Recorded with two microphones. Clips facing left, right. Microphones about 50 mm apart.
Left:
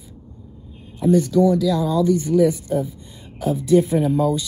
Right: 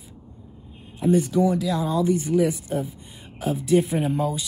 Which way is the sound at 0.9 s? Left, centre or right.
Right.